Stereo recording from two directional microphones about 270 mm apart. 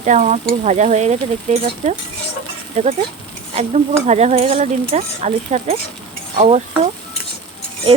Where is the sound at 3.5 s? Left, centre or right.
Right.